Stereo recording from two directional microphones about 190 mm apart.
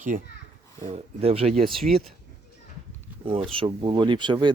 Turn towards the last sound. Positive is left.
turn(degrees=-25)  # may be behind; listen again after turning